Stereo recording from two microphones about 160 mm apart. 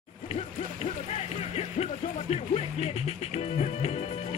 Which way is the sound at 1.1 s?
40° left (ahead or behind).